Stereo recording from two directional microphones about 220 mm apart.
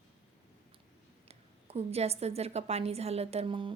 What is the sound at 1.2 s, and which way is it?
A woman's voice, 30° right (ahead or behind).